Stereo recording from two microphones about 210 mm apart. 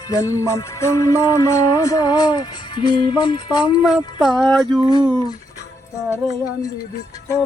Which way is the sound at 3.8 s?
Centre (ahead or behind).